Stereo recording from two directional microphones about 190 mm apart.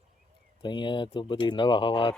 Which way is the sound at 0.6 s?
25° left (ahead or behind).